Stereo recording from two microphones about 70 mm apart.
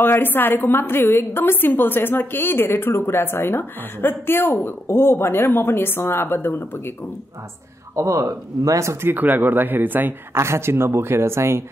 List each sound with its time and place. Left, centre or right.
0.0 s a woman's voice: left
7.9 s speech: right
9.0 s speech: right
10.3 s speech: right